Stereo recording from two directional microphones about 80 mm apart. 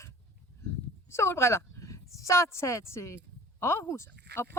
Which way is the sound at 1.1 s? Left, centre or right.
Left.